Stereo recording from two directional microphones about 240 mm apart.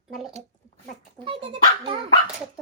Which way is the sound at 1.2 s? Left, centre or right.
Right.